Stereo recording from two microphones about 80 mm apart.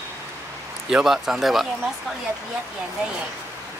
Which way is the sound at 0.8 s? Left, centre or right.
Centre.